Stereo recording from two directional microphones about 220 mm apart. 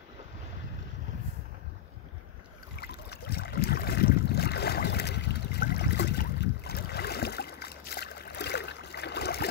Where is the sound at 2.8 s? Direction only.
45° left (ahead or behind).